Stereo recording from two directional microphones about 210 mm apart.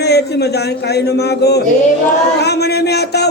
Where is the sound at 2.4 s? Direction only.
50° left (ahead or behind).